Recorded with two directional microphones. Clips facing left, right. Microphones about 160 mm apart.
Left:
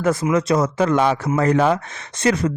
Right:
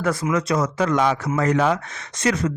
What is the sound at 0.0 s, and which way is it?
Speech, 20° left (ahead or behind).